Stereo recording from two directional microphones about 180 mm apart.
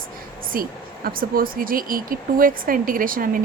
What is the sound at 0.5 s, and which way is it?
Speech, 55° right (ahead or behind).